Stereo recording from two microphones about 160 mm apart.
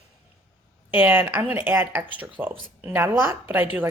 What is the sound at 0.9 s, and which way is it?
A woman's voice, 10° right (ahead or behind).